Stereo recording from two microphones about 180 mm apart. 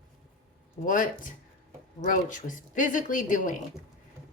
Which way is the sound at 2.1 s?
45° left (ahead or behind).